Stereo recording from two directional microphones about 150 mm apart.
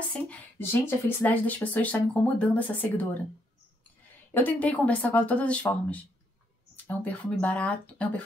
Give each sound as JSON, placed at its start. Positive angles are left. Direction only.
{"t": 0.1, "sound": "speech", "side_deg": 10}
{"t": 4.3, "sound": "speech", "side_deg": 10}